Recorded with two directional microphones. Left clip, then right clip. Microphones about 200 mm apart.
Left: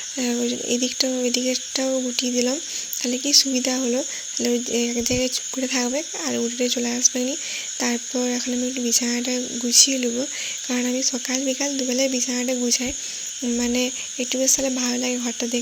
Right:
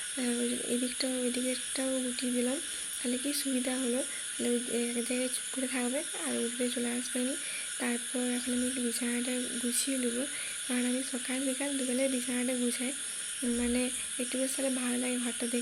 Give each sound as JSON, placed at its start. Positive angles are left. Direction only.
{"t": 0.2, "sound": "speech", "side_deg": 35}